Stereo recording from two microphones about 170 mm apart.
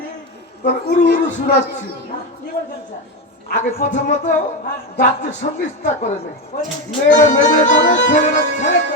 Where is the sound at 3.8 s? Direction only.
45° left (ahead or behind).